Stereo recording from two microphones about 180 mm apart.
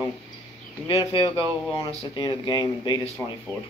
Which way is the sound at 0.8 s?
30° left (ahead or behind).